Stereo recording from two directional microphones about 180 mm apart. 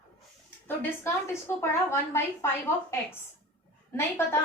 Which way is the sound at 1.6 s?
15° left (ahead or behind).